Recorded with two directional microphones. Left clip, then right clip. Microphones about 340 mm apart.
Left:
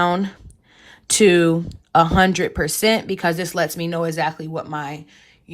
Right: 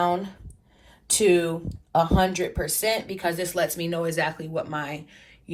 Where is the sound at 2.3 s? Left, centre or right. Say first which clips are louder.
Left 6 dB; left.